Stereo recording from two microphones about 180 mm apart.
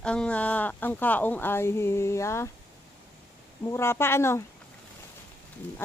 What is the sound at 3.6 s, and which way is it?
Speech, 15° left (ahead or behind).